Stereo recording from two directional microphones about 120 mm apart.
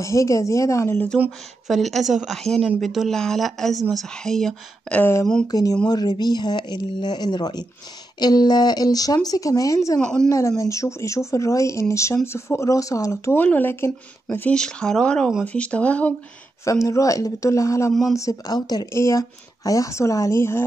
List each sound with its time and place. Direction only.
0.0 s speech: 25° left (ahead or behind)
1.7 s speech: centre (ahead or behind)
5.5 s speech: 30° left (ahead or behind)
9.9 s speech: 5° left (ahead or behind)
10.6 s speech: 25° left (ahead or behind)
16.6 s speech: 25° left (ahead or behind)